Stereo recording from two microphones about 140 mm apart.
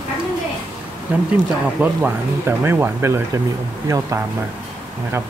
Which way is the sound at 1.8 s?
10° right (ahead or behind).